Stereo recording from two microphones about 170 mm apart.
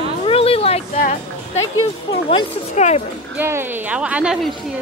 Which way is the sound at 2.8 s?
40° left (ahead or behind).